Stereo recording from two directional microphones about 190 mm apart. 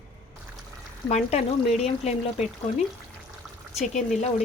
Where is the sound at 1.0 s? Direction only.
35° left (ahead or behind).